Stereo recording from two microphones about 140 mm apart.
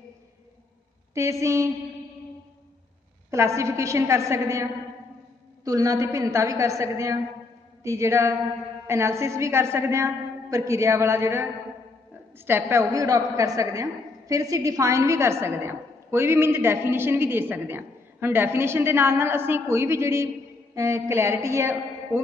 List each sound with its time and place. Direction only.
1.1 s a woman's voice: 20° right (ahead or behind)
3.3 s a woman's voice: 20° right (ahead or behind)
12.4 s a woman's voice: 15° right (ahead or behind)